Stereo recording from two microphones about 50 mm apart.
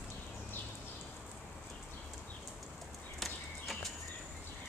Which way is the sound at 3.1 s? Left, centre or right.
Centre.